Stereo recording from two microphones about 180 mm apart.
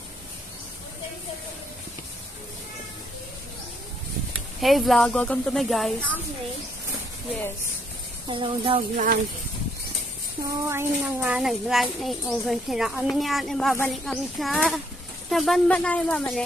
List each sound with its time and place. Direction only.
4.6 s a child's voice: centre (ahead or behind)
8.3 s speech: 30° right (ahead or behind)
8.9 s speech: 50° right (ahead or behind)
10.7 s a child's voice: 10° right (ahead or behind); by 16.4 s 5° left (ahead or behind)